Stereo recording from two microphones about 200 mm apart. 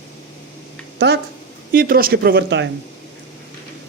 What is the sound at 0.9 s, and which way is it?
Speech, 55° right (ahead or behind).